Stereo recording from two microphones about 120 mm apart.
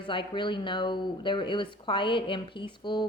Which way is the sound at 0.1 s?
40° left (ahead or behind).